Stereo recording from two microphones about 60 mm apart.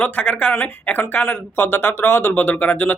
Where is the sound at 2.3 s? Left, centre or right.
Left.